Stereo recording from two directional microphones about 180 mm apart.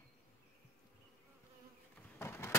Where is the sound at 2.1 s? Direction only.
15° left (ahead or behind).